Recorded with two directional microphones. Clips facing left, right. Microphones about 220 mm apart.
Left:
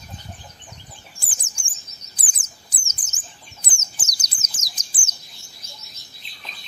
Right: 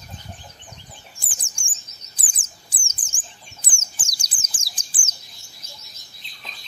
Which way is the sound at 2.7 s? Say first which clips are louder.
Left 1 dB; 30° right (ahead or behind).